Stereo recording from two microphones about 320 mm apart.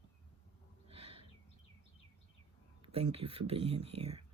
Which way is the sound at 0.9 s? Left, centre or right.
Centre.